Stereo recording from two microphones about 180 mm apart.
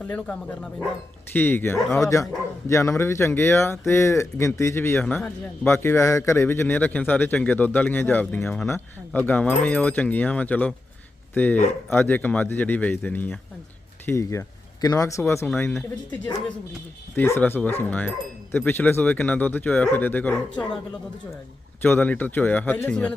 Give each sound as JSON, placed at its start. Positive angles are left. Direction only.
{"t": 0.0, "sound": "speech", "side_deg": 5}
{"t": 17.2, "sound": "speech", "side_deg": 10}
{"t": 21.8, "sound": "speech", "side_deg": 10}